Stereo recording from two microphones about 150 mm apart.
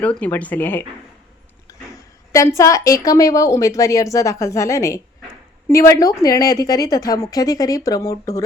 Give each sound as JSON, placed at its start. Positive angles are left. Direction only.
{"t": 0.0, "sound": "speech", "side_deg": 10}
{"t": 2.3, "sound": "a woman's voice", "side_deg": 20}